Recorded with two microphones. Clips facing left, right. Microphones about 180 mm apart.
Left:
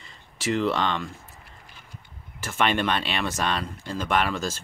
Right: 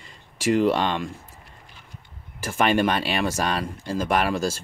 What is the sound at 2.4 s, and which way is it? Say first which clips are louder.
Speech: right 4 dB; 10° right (ahead or behind).